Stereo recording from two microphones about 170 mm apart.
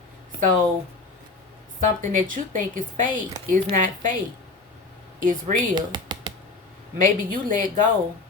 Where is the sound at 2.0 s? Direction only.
50° right (ahead or behind).